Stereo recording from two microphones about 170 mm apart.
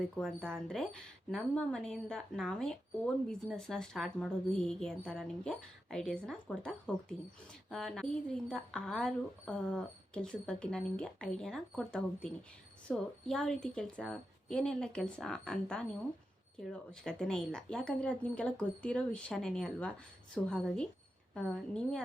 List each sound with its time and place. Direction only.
0.0 s a woman's voice: centre (ahead or behind)